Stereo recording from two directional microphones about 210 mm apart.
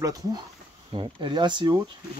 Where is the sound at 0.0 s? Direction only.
15° right (ahead or behind).